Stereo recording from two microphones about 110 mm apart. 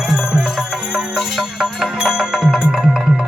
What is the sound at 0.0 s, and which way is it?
Music, 5° right (ahead or behind).